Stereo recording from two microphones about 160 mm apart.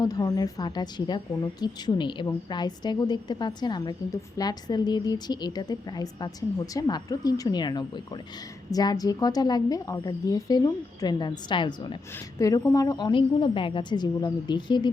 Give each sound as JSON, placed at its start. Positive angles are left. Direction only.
{"t": 0.0, "sound": "a woman's voice", "side_deg": 25}